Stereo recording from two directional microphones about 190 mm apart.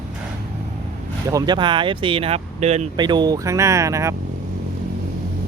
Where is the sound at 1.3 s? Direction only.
20° right (ahead or behind).